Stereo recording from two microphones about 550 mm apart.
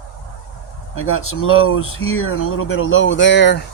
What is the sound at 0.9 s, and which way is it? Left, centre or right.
Speech, left.